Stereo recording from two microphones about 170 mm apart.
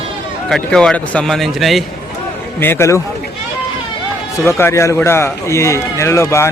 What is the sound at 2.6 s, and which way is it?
Speech, 15° left (ahead or behind).